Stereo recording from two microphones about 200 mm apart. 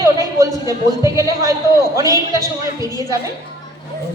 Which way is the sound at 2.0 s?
15° right (ahead or behind).